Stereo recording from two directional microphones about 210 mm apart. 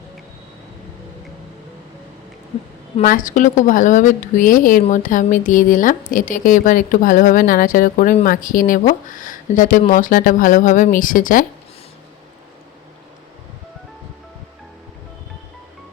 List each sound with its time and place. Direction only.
3.0 s a woman's voice: 40° left (ahead or behind)